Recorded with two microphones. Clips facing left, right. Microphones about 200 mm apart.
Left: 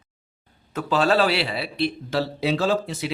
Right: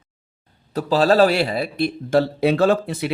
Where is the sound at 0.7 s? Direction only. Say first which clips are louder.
Right 5 dB; 35° right (ahead or behind).